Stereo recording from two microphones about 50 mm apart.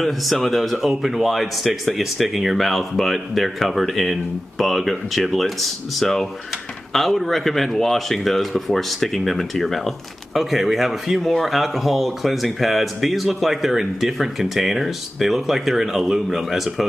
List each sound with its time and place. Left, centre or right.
0.0 s speech: centre